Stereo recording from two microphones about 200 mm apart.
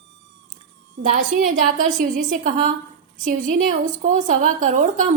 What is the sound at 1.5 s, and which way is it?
A woman's voice, 40° right (ahead or behind).